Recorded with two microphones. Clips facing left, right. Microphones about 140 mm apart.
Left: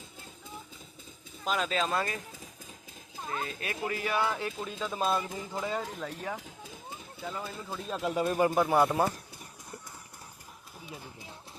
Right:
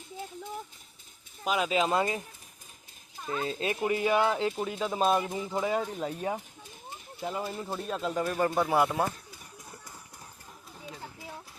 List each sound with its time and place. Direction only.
1.5 s speech: 10° right (ahead or behind)
3.4 s speech: 25° right (ahead or behind)
7.2 s speech: 20° right (ahead or behind)
7.9 s speech: centre (ahead or behind)
8.1 s speech: 15° left (ahead or behind)
8.5 s speech: centre (ahead or behind)